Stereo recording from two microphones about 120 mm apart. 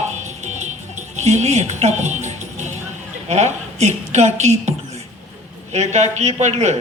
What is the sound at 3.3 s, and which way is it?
A man's voice, 70° right (ahead or behind).